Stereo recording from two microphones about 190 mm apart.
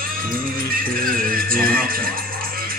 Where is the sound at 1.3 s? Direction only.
50° right (ahead or behind).